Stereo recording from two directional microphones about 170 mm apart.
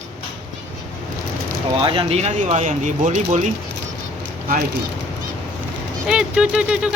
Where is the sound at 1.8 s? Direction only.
35° right (ahead or behind).